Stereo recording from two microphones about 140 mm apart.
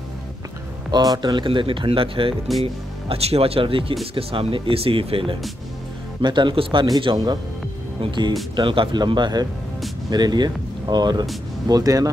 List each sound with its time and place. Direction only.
0.9 s speech: 30° right (ahead or behind)